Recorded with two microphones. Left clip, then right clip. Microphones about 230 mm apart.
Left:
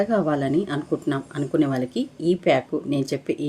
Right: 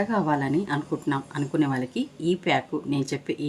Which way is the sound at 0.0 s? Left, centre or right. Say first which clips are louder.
Left 3 dB; centre.